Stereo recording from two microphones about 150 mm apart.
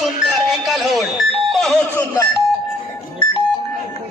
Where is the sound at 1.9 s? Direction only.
20° left (ahead or behind).